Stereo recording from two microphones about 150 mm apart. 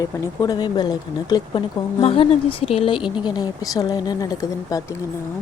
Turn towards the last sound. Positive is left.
turn(degrees=25)  # may be behind; listen again after turning